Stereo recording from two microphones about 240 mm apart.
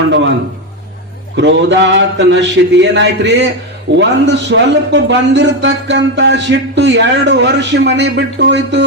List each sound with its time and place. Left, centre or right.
0.1 s a man's voice: right
1.4 s a man's voice: right